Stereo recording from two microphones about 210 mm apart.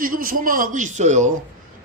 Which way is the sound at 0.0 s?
45° right (ahead or behind).